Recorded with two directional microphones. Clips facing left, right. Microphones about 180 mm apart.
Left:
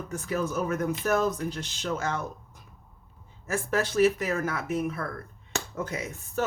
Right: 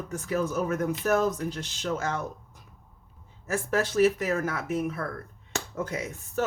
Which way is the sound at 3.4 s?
40° right (ahead or behind).